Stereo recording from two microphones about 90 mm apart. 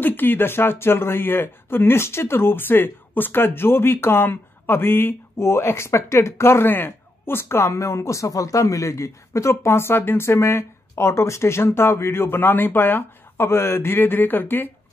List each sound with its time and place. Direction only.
0.0 s speech: 20° left (ahead or behind)